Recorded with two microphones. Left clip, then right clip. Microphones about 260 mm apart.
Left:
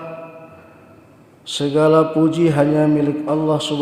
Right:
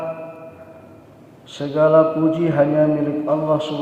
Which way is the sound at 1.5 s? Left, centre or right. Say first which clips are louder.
Even; left.